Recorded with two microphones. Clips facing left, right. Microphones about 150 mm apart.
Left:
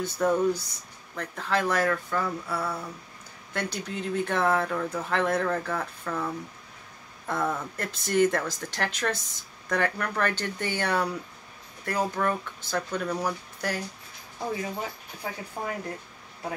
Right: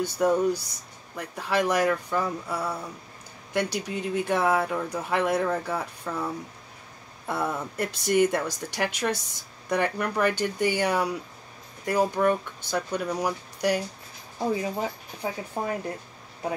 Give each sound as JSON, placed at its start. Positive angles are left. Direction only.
{"t": 0.0, "sound": "speech", "side_deg": -10}
{"t": 15.6, "sound": "speech", "side_deg": -35}